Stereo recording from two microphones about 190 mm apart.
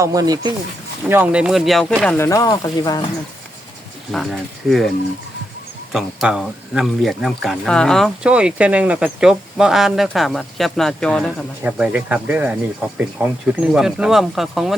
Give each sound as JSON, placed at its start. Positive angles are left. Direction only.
{"t": 0.0, "sound": "speech", "side_deg": -20}
{"t": 2.0, "sound": "speech", "side_deg": 15}
{"t": 4.1, "sound": "speech", "side_deg": 0}
{"t": 5.9, "sound": "speech", "side_deg": 0}
{"t": 11.6, "sound": "speech", "side_deg": -5}